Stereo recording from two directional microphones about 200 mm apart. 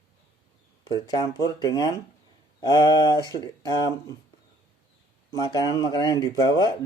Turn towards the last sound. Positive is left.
turn(degrees=20)  # may be behind; listen again after turning